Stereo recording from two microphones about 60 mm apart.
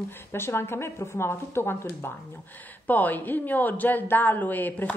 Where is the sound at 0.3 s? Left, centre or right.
Left.